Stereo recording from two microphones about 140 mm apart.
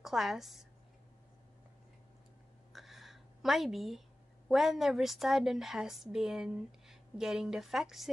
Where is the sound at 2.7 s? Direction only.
Centre (ahead or behind).